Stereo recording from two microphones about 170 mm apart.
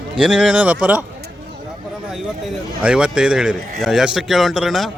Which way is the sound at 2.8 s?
5° right (ahead or behind).